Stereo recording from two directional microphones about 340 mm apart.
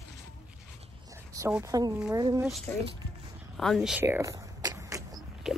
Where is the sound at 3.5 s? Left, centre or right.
Centre.